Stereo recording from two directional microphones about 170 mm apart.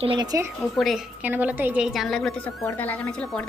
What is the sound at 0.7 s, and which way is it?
A woman's voice, centre (ahead or behind).